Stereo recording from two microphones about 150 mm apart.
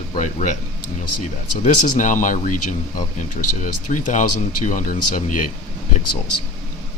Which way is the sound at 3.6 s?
60° left (ahead or behind).